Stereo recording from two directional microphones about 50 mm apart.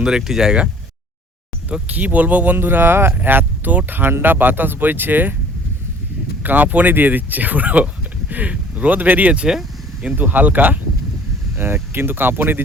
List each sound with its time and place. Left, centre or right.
0.2 s speech: centre
1.9 s speech: right
2.6 s speech: right
6.4 s speech: right
10.2 s speech: right
11.5 s speech: right